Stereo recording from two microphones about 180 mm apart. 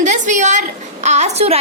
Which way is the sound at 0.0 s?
45° right (ahead or behind).